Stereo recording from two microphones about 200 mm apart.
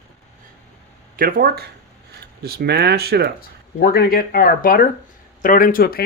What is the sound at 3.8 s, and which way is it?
Speech, 50° left (ahead or behind).